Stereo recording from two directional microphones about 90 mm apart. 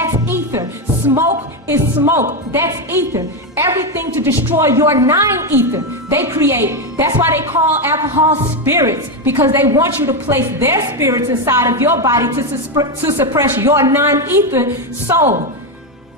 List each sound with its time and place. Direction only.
0.0 s music: 35° right (ahead or behind)
1.7 s a woman's voice: 30° right (ahead or behind)
3.2 s a woman's voice: 40° right (ahead or behind)
3.9 s a woman's voice: 25° right (ahead or behind)